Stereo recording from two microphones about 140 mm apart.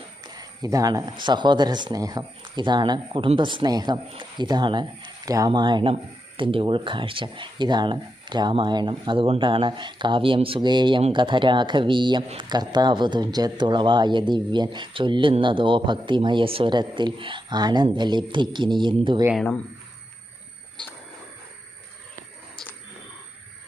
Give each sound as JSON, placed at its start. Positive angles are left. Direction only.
{"t": 0.3, "sound": "speech", "side_deg": -25}